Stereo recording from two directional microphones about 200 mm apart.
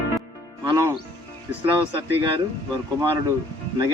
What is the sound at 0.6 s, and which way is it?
Music, 20° right (ahead or behind).